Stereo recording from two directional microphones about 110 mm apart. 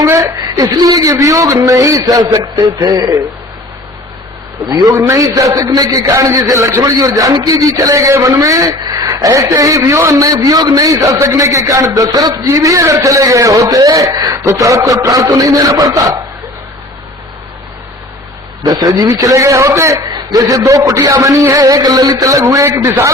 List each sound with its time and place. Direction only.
0.0 s a man's voice: 30° right (ahead or behind)
4.7 s a man's voice: 40° right (ahead or behind)
4.9 s a man's voice: 30° right (ahead or behind)
18.6 s a man's voice: 35° right (ahead or behind)